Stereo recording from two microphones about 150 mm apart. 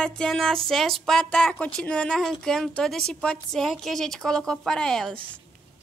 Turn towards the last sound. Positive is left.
turn(degrees=5)  # may be behind; listen again after turning